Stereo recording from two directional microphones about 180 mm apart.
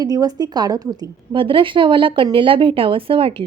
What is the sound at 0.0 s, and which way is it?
A woman's voice, 20° right (ahead or behind).